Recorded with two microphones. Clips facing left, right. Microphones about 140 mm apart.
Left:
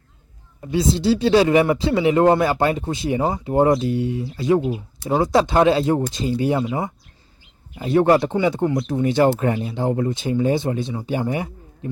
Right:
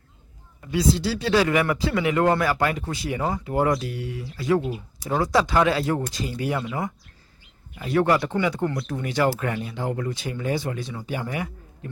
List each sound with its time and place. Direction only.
0.6 s speech: 25° left (ahead or behind)